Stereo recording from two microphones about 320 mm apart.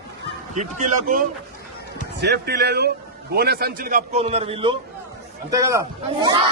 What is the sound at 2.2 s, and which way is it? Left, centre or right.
A man's voice, right.